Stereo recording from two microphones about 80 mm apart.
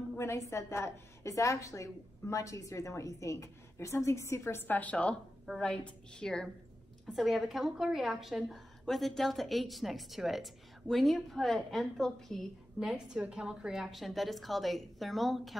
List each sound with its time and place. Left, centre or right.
0.2 s a woman's voice: left
4.6 s a woman's voice: centre
7.1 s a woman's voice: centre
12.7 s a woman's voice: centre